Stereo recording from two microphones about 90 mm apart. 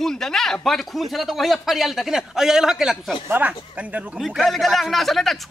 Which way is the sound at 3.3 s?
15° right (ahead or behind).